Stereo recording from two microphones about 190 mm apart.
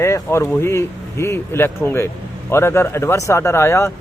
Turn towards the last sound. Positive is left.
turn(degrees=15)  # may be behind; listen again after turning